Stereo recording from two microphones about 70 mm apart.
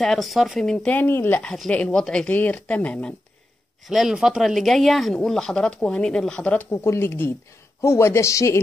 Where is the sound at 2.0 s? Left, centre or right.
Centre.